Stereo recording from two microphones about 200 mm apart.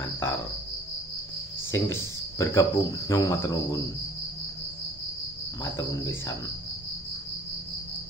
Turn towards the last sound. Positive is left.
turn(degrees=15)  # may be behind; listen again after turning